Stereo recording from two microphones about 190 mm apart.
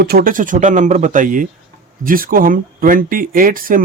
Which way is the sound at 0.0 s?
55° right (ahead or behind).